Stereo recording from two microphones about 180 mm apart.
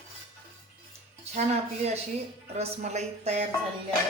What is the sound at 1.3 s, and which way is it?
Speech, 40° right (ahead or behind).